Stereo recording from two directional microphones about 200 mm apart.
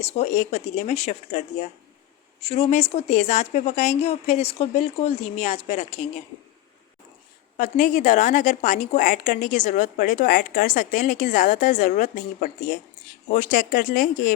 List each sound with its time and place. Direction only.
0.0 s a woman's voice: 30° left (ahead or behind)
7.5 s a woman's voice: 40° left (ahead or behind)